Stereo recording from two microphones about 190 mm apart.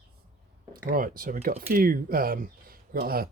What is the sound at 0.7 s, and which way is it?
Speech, 50° right (ahead or behind).